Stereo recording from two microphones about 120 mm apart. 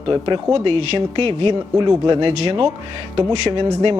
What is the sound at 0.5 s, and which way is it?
Speech, 55° right (ahead or behind).